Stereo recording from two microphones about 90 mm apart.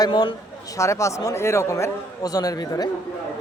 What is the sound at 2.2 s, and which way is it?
Speech, 45° left (ahead or behind).